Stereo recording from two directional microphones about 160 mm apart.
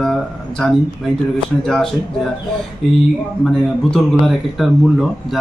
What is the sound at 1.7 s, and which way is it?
Speech, 5° left (ahead or behind).